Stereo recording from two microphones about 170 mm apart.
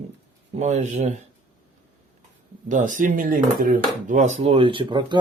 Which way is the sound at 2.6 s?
50° right (ahead or behind).